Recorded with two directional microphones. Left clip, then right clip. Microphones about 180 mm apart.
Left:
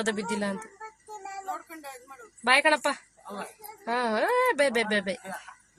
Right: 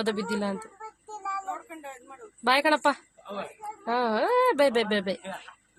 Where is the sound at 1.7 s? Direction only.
15° right (ahead or behind).